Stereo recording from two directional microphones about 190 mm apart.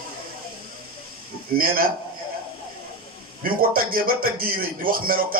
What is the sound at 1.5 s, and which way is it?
Speech, 50° right (ahead or behind).